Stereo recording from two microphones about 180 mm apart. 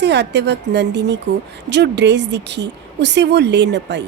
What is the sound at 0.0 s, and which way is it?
A woman's voice, 70° right (ahead or behind).